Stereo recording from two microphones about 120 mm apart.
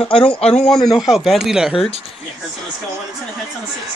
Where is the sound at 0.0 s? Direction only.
50° left (ahead or behind).